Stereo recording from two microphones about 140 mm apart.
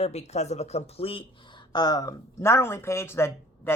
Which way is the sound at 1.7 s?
30° left (ahead or behind).